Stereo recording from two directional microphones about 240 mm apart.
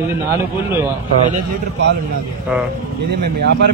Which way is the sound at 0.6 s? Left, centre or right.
Centre.